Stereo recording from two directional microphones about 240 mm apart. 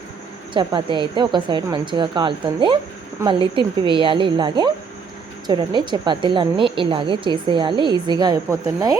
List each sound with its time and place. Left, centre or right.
0.5 s a woman's voice: centre